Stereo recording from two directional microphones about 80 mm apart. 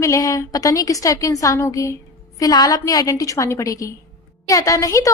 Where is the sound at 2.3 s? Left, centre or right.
Left.